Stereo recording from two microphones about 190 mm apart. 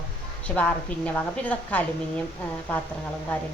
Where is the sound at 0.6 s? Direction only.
5° left (ahead or behind).